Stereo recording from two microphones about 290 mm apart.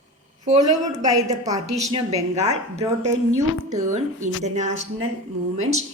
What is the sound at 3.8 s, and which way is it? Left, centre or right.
Speech, right.